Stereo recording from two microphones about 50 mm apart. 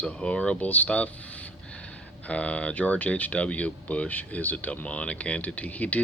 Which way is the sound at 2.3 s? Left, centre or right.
Left.